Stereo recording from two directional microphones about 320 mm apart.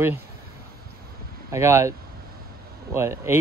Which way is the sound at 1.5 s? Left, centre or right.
Centre.